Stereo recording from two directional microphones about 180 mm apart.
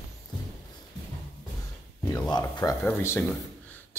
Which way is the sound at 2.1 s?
20° left (ahead or behind).